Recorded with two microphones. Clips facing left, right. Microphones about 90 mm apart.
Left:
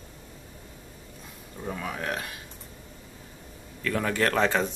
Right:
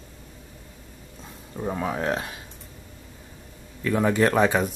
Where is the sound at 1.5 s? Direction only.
25° right (ahead or behind).